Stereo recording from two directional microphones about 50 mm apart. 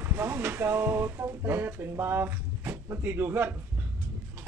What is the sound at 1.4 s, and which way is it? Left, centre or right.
Speech, right.